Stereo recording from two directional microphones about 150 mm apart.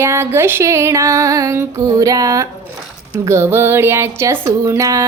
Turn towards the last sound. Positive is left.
turn(degrees=-20)  # may be behind; listen again after turning